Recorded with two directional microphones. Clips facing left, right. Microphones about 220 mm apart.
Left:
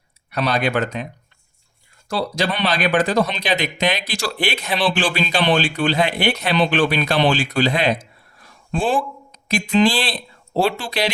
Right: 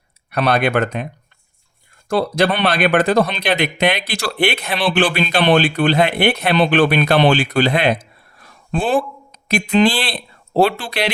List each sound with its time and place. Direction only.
0.3 s speech: 60° right (ahead or behind)
2.0 s speech: 55° right (ahead or behind)